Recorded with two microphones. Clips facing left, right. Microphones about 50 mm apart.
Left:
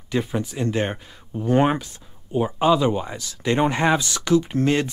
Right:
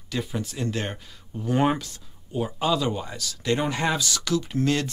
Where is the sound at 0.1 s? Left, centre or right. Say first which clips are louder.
Left 5 dB; left.